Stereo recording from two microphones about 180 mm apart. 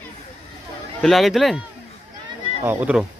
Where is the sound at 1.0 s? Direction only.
Centre (ahead or behind).